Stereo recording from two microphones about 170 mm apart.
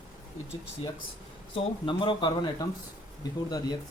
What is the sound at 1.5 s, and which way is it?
Speech, 30° left (ahead or behind).